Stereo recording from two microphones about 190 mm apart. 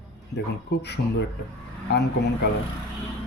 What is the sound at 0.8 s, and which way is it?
Speech, 65° left (ahead or behind).